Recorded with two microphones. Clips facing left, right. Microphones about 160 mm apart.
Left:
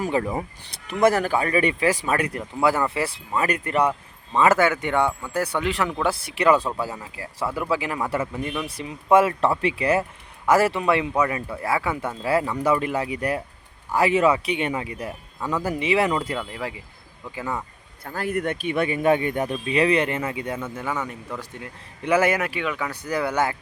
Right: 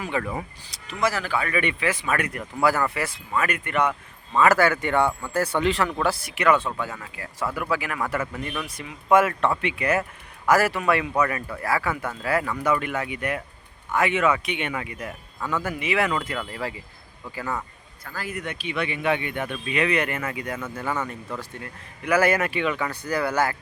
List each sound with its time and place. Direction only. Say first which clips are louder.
0.2 s speech: left 3 dB; 25° left (ahead or behind)
0.6 s speech: left 7 dB; 60° left (ahead or behind); by 3.9 s 35° left (ahead or behind)
4.4 s speech: even; 20° left (ahead or behind)
16.5 s speech: even; 15° left (ahead or behind)
18.2 s speech: left 7 dB; 55° left (ahead or behind); by 20.7 s 25° left (ahead or behind)
20.8 s speech: right 1 dB; centre (ahead or behind)
21.1 s speech: even; 15° left (ahead or behind)
22.4 s speech: right 2 dB; 5° left (ahead or behind)
23.0 s speech: left 1 dB; 20° left (ahead or behind)